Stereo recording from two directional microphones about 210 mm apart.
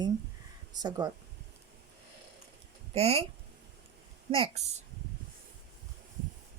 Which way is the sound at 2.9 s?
30° right (ahead or behind).